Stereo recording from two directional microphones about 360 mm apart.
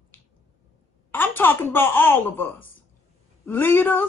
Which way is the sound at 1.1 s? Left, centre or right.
Centre.